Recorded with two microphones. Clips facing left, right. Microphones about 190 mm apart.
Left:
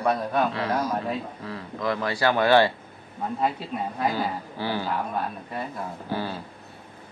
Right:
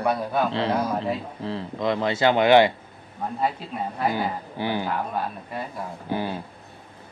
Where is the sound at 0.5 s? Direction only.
25° right (ahead or behind).